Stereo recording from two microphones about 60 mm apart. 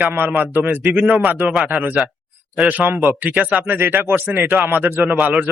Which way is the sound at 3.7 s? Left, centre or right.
Right.